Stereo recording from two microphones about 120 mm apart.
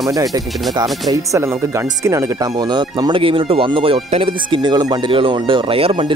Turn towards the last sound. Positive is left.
turn(degrees=-50)  # may be behind; listen again after turning